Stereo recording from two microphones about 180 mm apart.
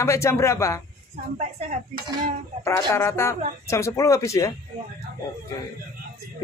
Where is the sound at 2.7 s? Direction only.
15° left (ahead or behind).